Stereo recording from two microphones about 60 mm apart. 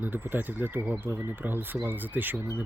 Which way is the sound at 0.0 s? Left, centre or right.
Right.